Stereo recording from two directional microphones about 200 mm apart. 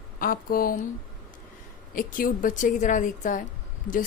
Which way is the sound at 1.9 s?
45° left (ahead or behind).